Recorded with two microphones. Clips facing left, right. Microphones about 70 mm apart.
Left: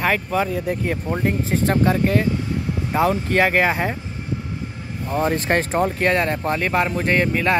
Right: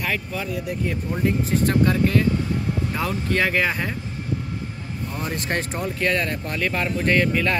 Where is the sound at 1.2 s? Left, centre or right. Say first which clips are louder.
Right 2 dB; left.